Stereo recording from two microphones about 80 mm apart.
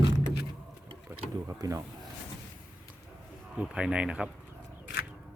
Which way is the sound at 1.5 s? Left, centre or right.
Right.